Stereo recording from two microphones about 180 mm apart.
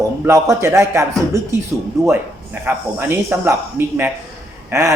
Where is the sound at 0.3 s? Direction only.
15° right (ahead or behind).